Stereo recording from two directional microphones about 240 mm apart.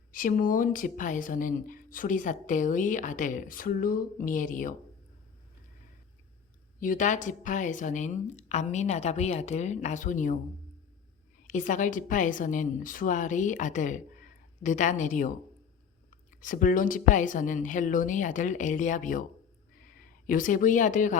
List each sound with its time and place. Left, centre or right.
0.1 s speech: left
6.7 s speech: left
11.4 s speech: left